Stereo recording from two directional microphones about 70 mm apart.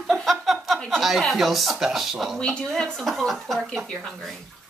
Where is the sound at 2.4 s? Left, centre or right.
Centre.